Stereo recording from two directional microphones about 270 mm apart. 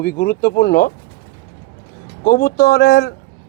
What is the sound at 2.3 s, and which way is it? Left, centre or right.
Speech, left.